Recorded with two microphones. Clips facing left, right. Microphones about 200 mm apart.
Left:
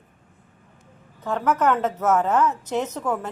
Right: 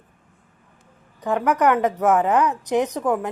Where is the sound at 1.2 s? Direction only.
15° right (ahead or behind).